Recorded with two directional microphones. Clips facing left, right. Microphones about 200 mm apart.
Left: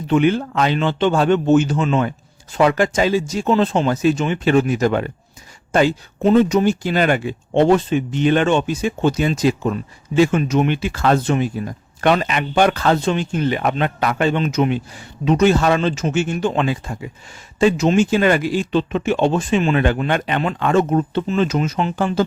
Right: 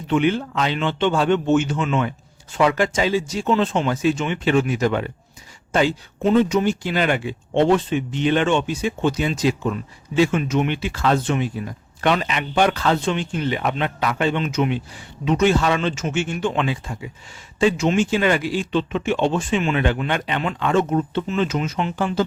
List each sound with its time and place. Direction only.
0.1 s a man's voice: 45° left (ahead or behind)